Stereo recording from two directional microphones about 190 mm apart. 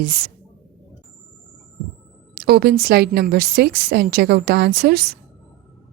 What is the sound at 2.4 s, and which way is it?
A woman's voice, 60° right (ahead or behind).